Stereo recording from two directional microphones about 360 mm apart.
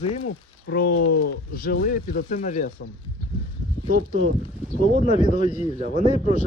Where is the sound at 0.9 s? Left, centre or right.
Left.